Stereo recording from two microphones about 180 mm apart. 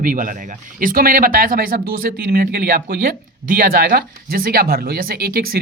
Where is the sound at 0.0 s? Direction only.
50° right (ahead or behind).